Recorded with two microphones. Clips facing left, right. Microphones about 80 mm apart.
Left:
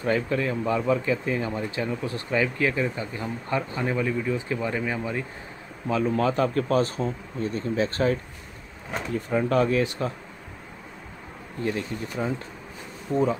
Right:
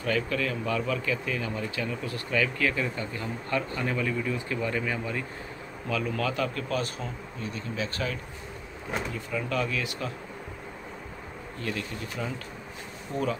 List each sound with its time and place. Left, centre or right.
0.0 s speech: left
11.6 s speech: left